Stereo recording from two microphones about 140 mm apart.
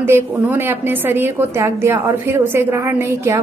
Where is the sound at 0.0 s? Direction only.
15° right (ahead or behind).